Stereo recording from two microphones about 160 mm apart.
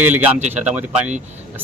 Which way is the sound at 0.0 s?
10° right (ahead or behind).